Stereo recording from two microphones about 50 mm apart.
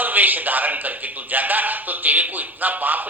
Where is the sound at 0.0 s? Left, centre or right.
Right.